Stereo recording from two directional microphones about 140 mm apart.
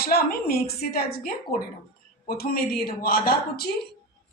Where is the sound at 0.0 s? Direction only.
90° left.